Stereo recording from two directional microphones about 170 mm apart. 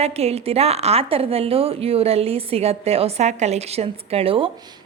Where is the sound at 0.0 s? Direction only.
35° right (ahead or behind).